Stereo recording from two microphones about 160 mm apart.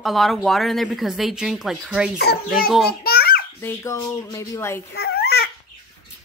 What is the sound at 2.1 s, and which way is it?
Speech, 80° left.